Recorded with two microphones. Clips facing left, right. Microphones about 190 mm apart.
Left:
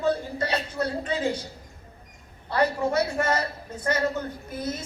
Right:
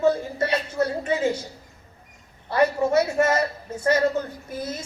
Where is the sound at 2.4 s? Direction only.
25° right (ahead or behind).